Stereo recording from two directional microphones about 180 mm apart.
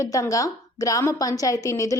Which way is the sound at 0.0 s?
20° left (ahead or behind).